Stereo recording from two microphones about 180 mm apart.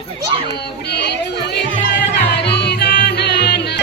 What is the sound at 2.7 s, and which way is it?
Music, 70° left (ahead or behind).